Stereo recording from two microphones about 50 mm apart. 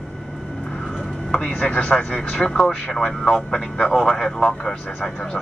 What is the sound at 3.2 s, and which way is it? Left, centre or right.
Speech, centre.